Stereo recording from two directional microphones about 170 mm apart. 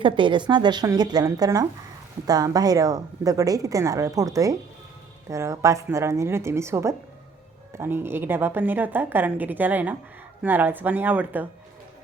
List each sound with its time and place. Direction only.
0.0 s a woman's voice: 30° right (ahead or behind); by 11.4 s 10° right (ahead or behind)